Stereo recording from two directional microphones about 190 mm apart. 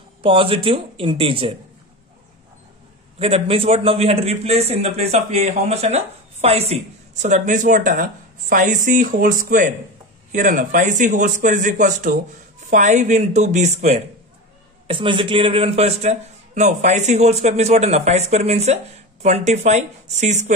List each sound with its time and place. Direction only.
0.2 s speech: 30° right (ahead or behind)
3.2 s a man's voice: 30° right (ahead or behind)